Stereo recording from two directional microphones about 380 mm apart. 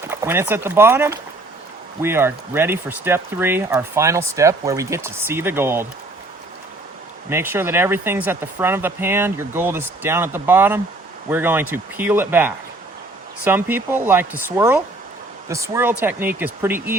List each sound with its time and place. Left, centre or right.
0.1 s speech: centre
7.3 s speech: centre